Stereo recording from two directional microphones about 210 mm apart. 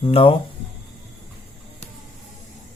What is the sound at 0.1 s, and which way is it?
Speech, 25° left (ahead or behind).